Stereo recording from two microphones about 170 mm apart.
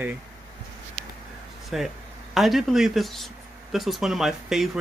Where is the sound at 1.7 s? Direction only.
Centre (ahead or behind).